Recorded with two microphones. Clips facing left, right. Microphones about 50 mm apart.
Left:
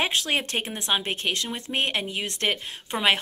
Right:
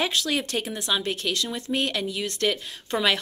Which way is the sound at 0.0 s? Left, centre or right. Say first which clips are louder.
Even; left.